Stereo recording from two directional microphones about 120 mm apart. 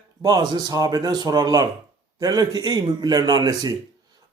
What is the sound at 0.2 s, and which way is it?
Speech, 30° right (ahead or behind).